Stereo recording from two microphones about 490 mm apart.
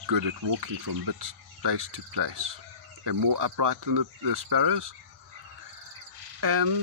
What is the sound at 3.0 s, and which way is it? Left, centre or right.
Speech, right.